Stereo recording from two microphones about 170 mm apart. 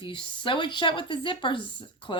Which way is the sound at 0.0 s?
30° left (ahead or behind).